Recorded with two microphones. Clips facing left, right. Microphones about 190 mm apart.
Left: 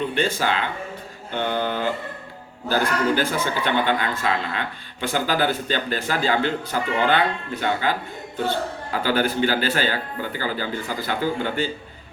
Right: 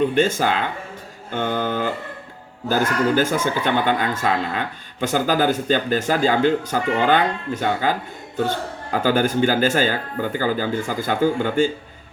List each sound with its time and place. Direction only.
0.1 s speech: 45° right (ahead or behind)